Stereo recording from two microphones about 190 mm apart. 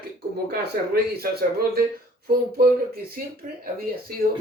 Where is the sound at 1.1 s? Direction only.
55° right (ahead or behind).